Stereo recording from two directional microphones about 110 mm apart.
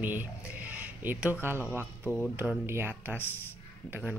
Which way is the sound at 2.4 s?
20° right (ahead or behind).